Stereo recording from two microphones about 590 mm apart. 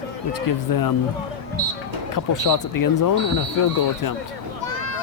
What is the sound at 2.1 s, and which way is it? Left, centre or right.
Speech, left.